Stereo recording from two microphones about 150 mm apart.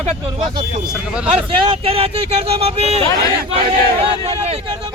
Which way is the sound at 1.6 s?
35° right (ahead or behind).